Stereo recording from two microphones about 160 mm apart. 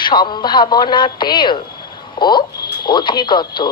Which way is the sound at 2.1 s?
30° left (ahead or behind).